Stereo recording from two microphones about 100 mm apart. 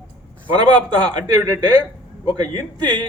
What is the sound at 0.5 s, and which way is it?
Speech, 50° right (ahead or behind).